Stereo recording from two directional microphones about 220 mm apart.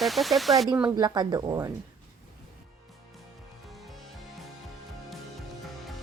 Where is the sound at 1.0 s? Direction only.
20° right (ahead or behind).